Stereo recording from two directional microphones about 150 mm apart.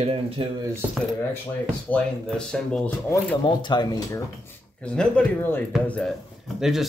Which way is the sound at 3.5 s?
30° left (ahead or behind).